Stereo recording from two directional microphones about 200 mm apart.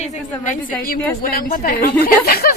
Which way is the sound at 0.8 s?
45° left (ahead or behind).